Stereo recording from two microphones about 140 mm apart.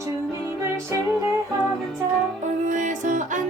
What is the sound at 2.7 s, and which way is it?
Music, 60° right (ahead or behind).